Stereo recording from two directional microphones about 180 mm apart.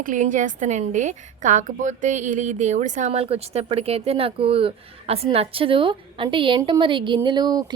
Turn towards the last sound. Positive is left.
turn(degrees=-25)  # may be behind; listen again after turning